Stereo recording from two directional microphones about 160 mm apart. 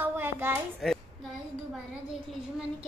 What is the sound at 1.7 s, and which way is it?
Speech, 5° right (ahead or behind).